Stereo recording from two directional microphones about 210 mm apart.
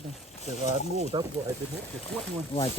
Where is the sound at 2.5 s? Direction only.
25° left (ahead or behind).